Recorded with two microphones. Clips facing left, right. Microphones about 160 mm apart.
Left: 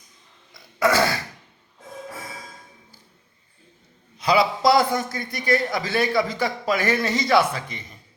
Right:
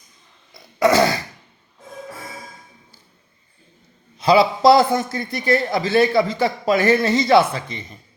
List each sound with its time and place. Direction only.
0.8 s throat clearing: 20° right (ahead or behind)
4.2 s a man's voice: 30° right (ahead or behind)